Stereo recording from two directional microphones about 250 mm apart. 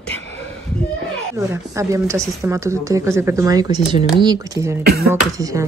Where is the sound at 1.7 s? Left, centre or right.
Centre.